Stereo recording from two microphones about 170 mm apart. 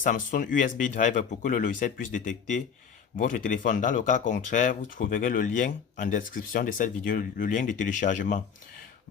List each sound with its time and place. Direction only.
0.0 s speech: 50° left (ahead or behind)